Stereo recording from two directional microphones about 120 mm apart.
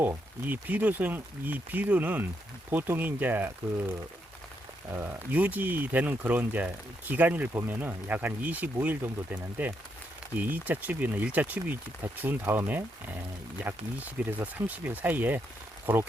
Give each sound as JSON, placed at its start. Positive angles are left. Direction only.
{"t": 0.0, "sound": "speech", "side_deg": -15}
{"t": 4.9, "sound": "speech", "side_deg": -15}